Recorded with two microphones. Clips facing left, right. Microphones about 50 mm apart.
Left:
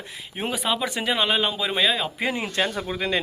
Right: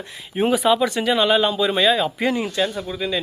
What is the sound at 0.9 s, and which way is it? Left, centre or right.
Speech, centre.